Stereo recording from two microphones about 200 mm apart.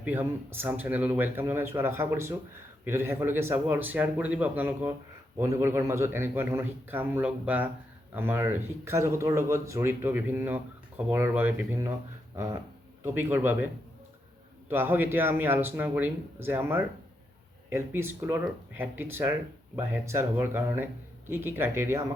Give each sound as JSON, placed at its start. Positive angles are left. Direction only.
{"t": 0.0, "sound": "speech", "side_deg": -10}
{"t": 13.0, "sound": "speech", "side_deg": -10}
{"t": 14.7, "sound": "speech", "side_deg": -10}